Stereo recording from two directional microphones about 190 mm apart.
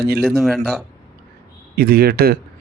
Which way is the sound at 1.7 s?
55° right (ahead or behind).